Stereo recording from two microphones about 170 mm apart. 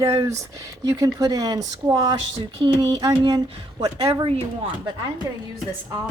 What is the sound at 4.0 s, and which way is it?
Speech, 35° right (ahead or behind).